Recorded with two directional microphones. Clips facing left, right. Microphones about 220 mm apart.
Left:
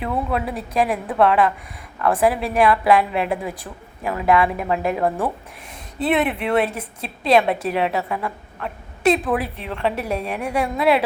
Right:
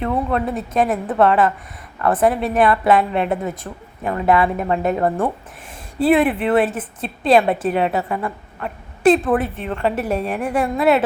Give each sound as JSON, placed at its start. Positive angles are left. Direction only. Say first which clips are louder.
{"t": 0.0, "sound": "a woman's voice", "louder": "right 3 dB", "side_deg": 5}